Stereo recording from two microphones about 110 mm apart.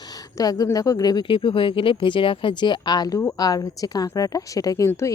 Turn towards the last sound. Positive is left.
turn(degrees=30)  # may be behind; listen again after turning